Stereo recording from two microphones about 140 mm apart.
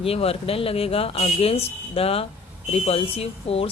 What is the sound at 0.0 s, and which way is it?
Speech, 45° left (ahead or behind).